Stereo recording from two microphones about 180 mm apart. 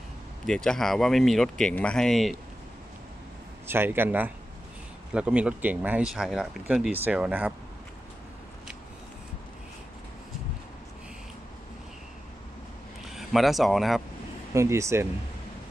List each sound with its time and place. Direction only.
0.4 s speech: 5° left (ahead or behind)
3.7 s speech: 10° right (ahead or behind)
13.1 s speech: centre (ahead or behind)
14.5 s speech: 15° right (ahead or behind)